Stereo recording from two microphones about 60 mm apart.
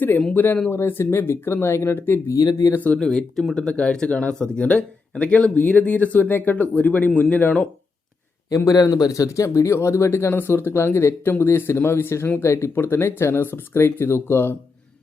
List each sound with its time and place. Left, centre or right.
0.3 s speech: left
0.7 s speech: left
2.2 s speech: left
3.0 s speech: centre
8.4 s speech: left